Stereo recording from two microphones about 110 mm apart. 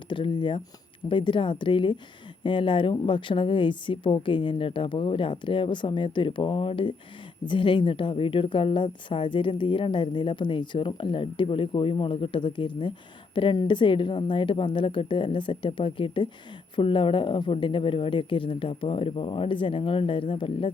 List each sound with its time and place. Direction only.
0.1 s a woman's voice: 50° left (ahead or behind)